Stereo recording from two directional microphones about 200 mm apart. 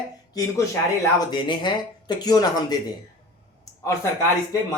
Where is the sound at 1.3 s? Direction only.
20° left (ahead or behind).